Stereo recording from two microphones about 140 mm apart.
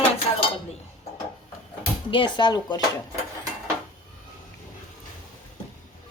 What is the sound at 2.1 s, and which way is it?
Speech, 35° left (ahead or behind).